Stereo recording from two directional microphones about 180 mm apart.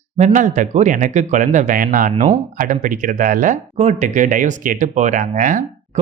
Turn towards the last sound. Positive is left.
turn(degrees=-50)  # may be behind; listen again after turning